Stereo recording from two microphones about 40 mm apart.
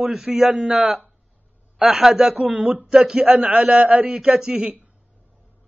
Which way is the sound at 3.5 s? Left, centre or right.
Right.